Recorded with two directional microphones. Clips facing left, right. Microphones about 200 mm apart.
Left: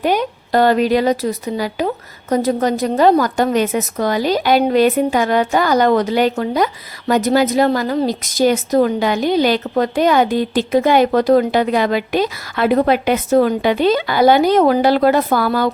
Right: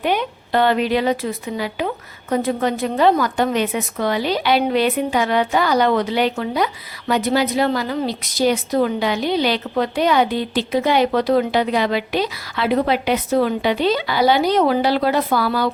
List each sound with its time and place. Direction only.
0.0 s a woman's voice: 40° left (ahead or behind)